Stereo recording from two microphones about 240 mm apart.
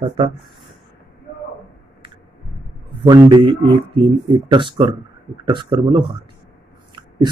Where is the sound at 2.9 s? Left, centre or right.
Centre.